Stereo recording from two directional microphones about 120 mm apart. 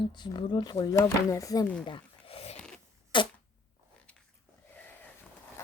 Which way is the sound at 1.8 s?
50° left (ahead or behind).